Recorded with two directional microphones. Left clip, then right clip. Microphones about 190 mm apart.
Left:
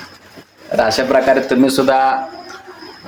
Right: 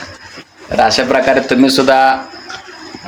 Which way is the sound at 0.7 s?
Centre (ahead or behind).